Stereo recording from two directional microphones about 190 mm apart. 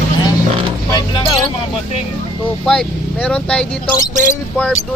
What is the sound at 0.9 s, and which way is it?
Vehicle, 20° left (ahead or behind).